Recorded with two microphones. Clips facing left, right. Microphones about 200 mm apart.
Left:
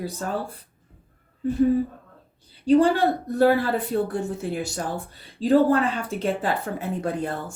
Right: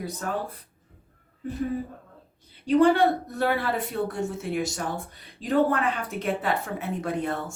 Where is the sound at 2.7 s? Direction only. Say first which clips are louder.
Left 1 dB; 35° left (ahead or behind).